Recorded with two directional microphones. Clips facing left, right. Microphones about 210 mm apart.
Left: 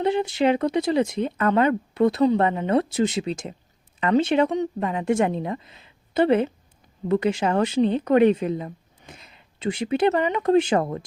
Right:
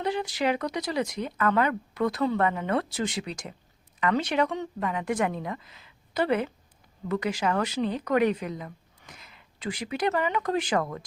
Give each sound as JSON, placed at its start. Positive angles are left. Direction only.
{"t": 0.0, "sound": "a woman's voice", "side_deg": 25}